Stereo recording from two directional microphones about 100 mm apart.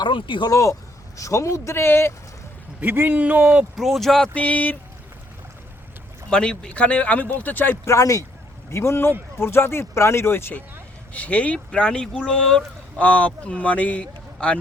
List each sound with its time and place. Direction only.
0.0 s speech: 55° left (ahead or behind)
0.5 s speech: 30° left (ahead or behind)
2.8 s speech: 20° right (ahead or behind)
3.8 s speech: centre (ahead or behind)
4.4 s speech: 15° left (ahead or behind)
6.3 s speech: 10° left (ahead or behind)
7.9 s speech: 30° left (ahead or behind); by 14.6 s 10° left (ahead or behind)